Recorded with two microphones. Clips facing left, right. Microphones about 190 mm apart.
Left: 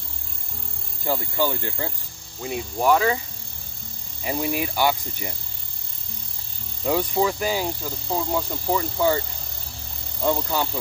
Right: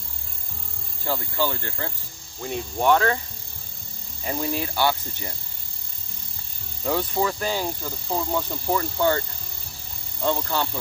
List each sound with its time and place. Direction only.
1.0 s speech: 15° left (ahead or behind)
4.2 s speech: 10° left (ahead or behind)
6.8 s speech: 10° left (ahead or behind)
10.2 s speech: 10° left (ahead or behind)